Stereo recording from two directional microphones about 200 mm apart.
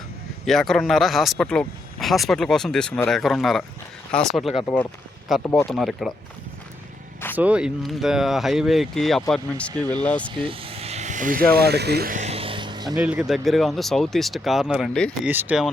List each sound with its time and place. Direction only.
0.4 s speech: centre (ahead or behind)
5.4 s speech: 15° left (ahead or behind)
5.6 s speech: centre (ahead or behind)
7.3 s speech: 5° right (ahead or behind)
10.3 s speech: 25° right (ahead or behind)
13.0 s speech: 5° right (ahead or behind)